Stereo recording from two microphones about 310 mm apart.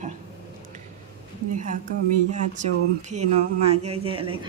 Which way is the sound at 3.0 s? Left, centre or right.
Right.